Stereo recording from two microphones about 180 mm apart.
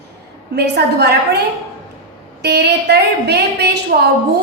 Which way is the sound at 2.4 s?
65° right (ahead or behind).